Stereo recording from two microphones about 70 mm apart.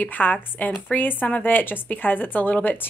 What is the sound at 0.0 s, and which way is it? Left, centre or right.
Speech, left.